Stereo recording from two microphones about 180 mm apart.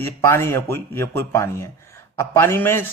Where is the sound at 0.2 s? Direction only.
15° left (ahead or behind).